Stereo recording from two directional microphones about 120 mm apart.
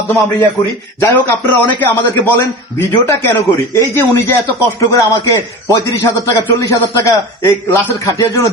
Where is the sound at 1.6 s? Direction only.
15° left (ahead or behind).